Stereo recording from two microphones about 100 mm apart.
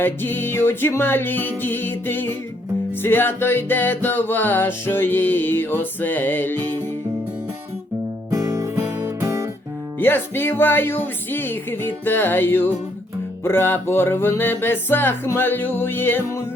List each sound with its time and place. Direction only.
0.0 s music: 20° left (ahead or behind)
8.3 s music: 30° right (ahead or behind)
10.0 s music: 20° left (ahead or behind)